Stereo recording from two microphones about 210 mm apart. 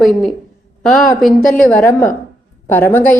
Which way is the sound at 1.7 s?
10° left (ahead or behind).